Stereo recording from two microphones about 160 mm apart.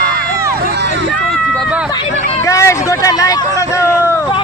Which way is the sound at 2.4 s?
20° left (ahead or behind).